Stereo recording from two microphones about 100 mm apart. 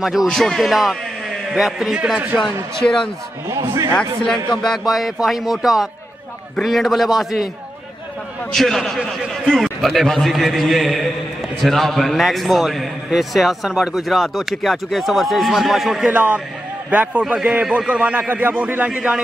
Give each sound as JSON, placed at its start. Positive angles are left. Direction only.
{"t": 0.0, "sound": "a man's voice", "side_deg": -5}
{"t": 2.8, "sound": "speech", "side_deg": 15}
{"t": 3.4, "sound": "a man's voice", "side_deg": -30}
{"t": 4.6, "sound": "a man's voice", "side_deg": 0}
{"t": 8.5, "sound": "a man's voice", "side_deg": 5}
{"t": 16.1, "sound": "a man's voice", "side_deg": -15}